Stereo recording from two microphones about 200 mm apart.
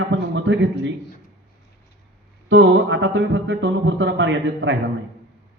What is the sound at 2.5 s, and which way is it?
A man's voice, 65° right (ahead or behind).